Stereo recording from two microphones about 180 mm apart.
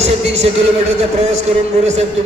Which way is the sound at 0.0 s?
35° right (ahead or behind).